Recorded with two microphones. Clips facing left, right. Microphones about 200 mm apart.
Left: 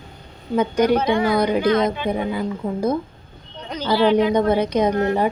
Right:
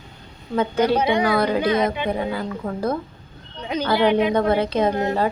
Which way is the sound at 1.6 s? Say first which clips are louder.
Left 2 dB; 15° right (ahead or behind).